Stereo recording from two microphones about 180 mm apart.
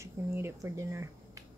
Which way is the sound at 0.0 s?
15° right (ahead or behind).